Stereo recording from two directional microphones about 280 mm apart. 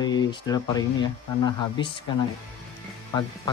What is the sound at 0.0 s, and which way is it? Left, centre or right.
Speech, centre.